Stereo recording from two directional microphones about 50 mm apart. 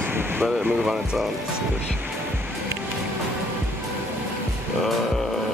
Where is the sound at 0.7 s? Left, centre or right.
Centre.